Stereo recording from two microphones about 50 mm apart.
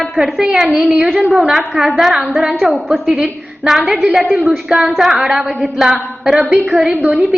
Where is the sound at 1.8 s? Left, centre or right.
Centre.